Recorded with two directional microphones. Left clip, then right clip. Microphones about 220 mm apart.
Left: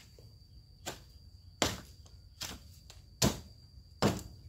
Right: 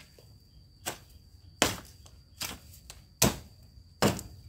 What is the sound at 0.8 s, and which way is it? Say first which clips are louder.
Arrow: right 5 dB; 25° right (ahead or behind).